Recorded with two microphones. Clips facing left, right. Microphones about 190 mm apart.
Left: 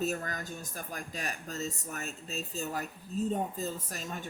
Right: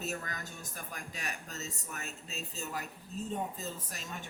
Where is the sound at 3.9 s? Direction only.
40° left (ahead or behind).